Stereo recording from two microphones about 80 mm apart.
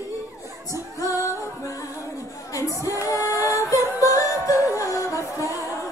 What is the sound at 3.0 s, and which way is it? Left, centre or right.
Singing, left.